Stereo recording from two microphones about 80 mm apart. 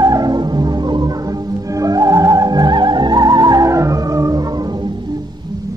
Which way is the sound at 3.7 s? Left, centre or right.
Right.